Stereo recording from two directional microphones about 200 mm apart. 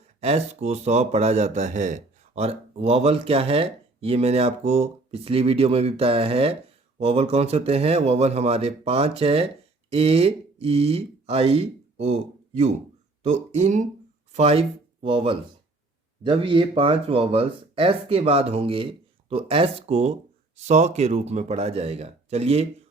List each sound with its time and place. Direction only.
0.2 s speech: 30° right (ahead or behind)